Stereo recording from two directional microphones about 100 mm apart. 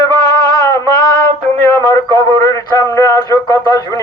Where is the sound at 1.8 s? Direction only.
35° left (ahead or behind).